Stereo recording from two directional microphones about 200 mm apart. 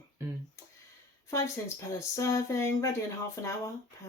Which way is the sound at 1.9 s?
15° left (ahead or behind).